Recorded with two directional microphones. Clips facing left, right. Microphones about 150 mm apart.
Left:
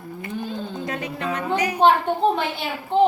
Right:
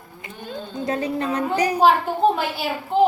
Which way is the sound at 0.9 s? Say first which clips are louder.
Right 6 dB; 35° right (ahead or behind).